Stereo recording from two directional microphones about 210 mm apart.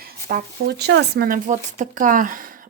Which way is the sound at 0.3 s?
50° right (ahead or behind).